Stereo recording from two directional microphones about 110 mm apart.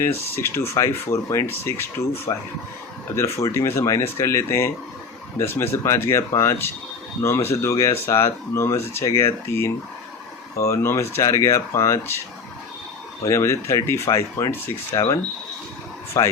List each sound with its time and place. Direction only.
0.3 s speech: 25° left (ahead or behind)
3.3 s speech: 25° left (ahead or behind)
13.2 s speech: 25° left (ahead or behind)